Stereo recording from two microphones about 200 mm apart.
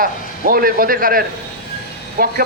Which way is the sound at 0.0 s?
45° right (ahead or behind).